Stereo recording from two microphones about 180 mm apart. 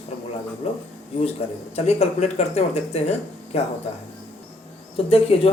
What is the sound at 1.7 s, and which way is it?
Speech, 35° left (ahead or behind).